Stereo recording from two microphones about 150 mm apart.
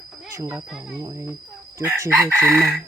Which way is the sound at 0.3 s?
20° right (ahead or behind).